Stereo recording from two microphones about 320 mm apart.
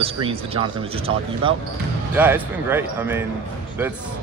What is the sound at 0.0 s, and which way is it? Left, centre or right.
Speech, centre.